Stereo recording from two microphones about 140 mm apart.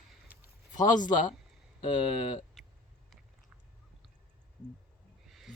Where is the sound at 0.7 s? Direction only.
65° left (ahead or behind).